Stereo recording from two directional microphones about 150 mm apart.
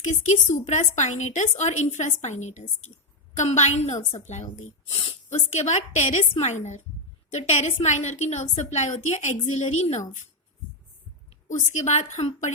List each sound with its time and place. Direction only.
0.0 s speech: 55° left (ahead or behind)
11.4 s speech: 50° left (ahead or behind)